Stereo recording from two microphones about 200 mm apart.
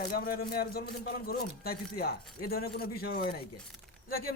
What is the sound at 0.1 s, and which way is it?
Speech, 50° left (ahead or behind).